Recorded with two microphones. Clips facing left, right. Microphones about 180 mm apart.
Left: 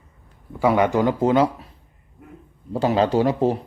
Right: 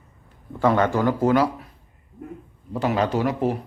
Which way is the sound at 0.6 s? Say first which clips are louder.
Left 1 dB; 10° left (ahead or behind).